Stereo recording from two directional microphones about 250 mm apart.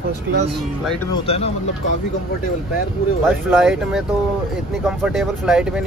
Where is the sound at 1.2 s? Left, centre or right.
Left.